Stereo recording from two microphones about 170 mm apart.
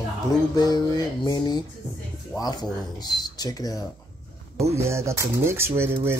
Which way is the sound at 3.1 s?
25° left (ahead or behind).